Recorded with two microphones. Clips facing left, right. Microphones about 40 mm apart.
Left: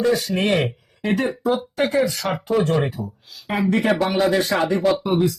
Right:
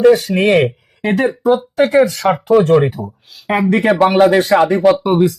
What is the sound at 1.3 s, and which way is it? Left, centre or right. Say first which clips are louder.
Speech: right 7 dB; right.